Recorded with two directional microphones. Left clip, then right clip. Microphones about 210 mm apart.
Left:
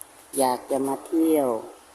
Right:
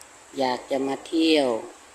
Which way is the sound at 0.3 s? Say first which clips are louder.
Left 2 dB; 10° left (ahead or behind).